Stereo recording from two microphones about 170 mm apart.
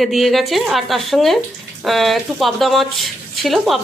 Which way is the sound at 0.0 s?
Centre (ahead or behind).